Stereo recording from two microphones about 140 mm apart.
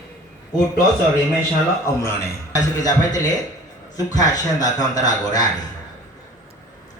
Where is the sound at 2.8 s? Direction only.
25° left (ahead or behind).